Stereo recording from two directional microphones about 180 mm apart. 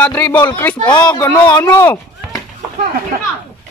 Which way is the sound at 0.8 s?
25° left (ahead or behind).